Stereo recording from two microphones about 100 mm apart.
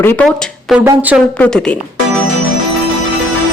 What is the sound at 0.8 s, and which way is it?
Speech, 15° right (ahead or behind).